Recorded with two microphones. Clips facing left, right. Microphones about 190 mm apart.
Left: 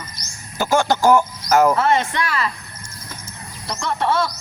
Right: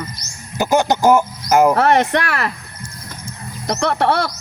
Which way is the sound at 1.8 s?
65° right (ahead or behind).